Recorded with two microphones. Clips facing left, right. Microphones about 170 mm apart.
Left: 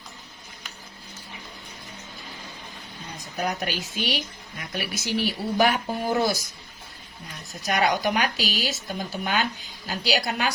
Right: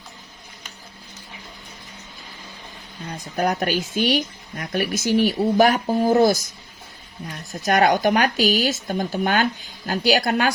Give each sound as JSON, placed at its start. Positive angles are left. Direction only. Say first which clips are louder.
{"t": 3.3, "sound": "a woman's voice", "louder": "right 7 dB", "side_deg": -50}
{"t": 7.6, "sound": "a woman's voice", "louder": "right 6 dB", "side_deg": -50}